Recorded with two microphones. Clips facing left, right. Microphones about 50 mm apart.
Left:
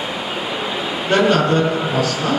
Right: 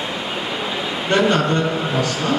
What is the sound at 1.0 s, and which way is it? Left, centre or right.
A man's voice, centre.